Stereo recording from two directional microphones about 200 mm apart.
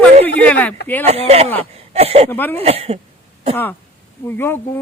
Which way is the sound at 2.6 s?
30° right (ahead or behind).